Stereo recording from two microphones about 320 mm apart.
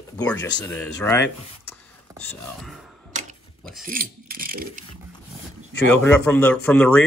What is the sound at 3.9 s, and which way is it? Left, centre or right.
Mechanisms, right.